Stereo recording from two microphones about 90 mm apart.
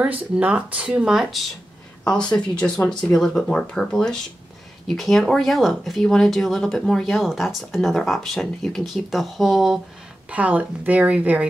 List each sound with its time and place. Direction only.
0.0 s speech: 15° right (ahead or behind)
2.0 s speech: 10° left (ahead or behind)
10.3 s speech: 15° right (ahead or behind)